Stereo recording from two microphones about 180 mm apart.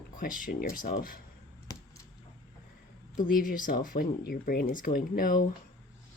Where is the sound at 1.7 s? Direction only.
20° left (ahead or behind).